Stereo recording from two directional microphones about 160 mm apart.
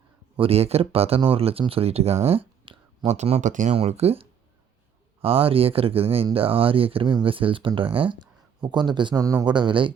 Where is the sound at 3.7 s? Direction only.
40° right (ahead or behind).